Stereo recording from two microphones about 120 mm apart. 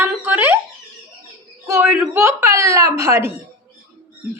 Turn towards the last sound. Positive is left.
turn(degrees=-25)  # may be behind; listen again after turning